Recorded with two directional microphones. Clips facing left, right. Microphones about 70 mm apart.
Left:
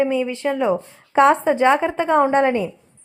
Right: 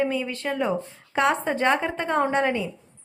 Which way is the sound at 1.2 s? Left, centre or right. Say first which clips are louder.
Left 8 dB; left.